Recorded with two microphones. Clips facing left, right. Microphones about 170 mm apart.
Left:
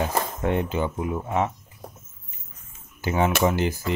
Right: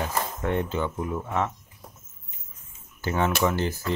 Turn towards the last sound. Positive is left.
turn(degrees=15)  # may be behind; listen again after turning